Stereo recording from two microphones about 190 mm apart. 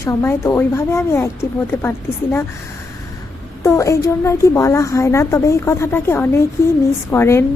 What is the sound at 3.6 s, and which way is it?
A woman's voice, 15° left (ahead or behind).